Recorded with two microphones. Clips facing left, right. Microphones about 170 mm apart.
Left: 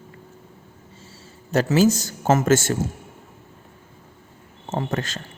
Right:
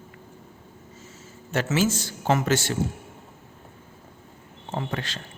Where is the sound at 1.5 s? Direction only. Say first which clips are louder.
Left 6 dB; 40° left (ahead or behind).